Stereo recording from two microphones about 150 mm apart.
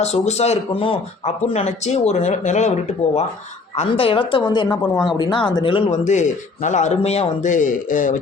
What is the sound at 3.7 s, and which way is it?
Speech, 40° left (ahead or behind).